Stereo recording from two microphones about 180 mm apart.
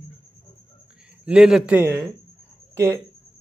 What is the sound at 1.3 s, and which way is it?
Speech, 5° right (ahead or behind).